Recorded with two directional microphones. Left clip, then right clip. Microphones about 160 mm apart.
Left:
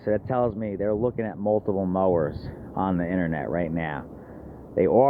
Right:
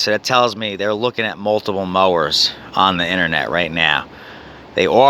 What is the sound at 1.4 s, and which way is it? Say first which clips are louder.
Speech: right 4 dB; 55° right (ahead or behind).